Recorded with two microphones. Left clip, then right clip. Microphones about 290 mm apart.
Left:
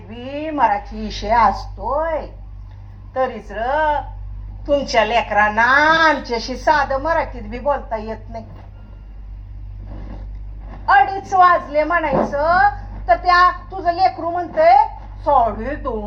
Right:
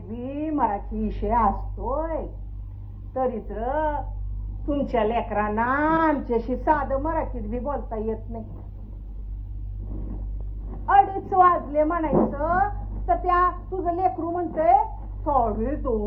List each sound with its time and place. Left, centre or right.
0.3 s a woman's voice: left
3.1 s a woman's voice: left
10.8 s a woman's voice: left